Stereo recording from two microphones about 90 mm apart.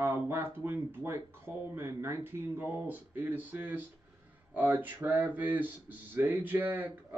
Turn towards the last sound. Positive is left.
turn(degrees=-20)  # may be behind; listen again after turning